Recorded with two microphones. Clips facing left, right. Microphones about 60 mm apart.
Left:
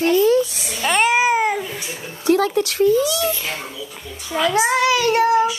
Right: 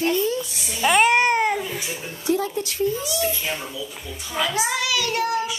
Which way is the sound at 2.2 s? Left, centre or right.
Left.